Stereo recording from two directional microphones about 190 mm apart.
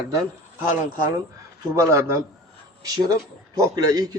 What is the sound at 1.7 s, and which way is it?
Speech, 15° right (ahead or behind).